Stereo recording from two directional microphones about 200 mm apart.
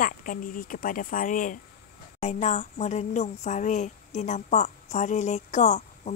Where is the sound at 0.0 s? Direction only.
40° left (ahead or behind).